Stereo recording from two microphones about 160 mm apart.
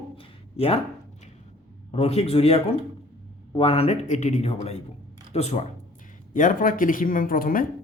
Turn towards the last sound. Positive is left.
turn(degrees=60)  # may be behind; listen again after turning